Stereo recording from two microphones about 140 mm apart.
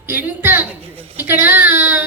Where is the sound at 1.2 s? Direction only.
10° right (ahead or behind).